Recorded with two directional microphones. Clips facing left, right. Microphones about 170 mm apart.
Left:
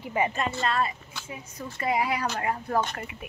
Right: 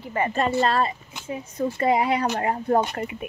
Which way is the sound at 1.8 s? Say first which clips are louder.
Right 5 dB; 30° right (ahead or behind).